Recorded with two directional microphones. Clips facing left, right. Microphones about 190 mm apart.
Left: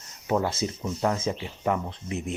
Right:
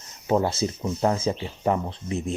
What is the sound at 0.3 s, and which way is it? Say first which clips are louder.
Speech: right 3 dB; 30° right (ahead or behind).